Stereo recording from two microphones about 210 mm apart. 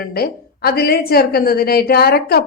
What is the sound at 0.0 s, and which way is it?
Speech, 45° left (ahead or behind).